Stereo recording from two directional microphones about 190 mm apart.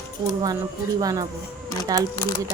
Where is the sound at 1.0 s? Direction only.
20° right (ahead or behind).